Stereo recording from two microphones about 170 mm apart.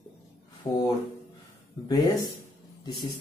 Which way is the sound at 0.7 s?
20° left (ahead or behind).